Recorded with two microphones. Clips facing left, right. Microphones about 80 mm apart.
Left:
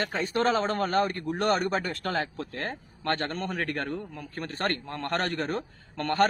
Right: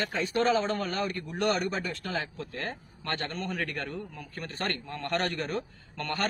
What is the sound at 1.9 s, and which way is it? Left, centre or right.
A man's voice, left.